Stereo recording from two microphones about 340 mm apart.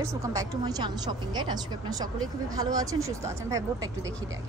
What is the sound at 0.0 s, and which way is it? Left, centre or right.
A woman's voice, centre.